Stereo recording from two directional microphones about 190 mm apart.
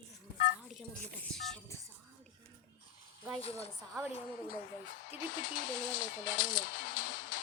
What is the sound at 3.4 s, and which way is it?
Speech, 35° left (ahead or behind).